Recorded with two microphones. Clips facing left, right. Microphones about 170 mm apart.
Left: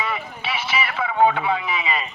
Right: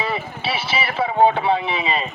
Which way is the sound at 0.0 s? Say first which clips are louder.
Right 3 dB; 30° right (ahead or behind).